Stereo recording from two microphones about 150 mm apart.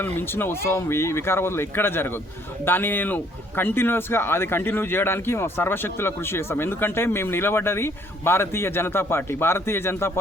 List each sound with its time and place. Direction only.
0.0 s a man's voice: 15° left (ahead or behind)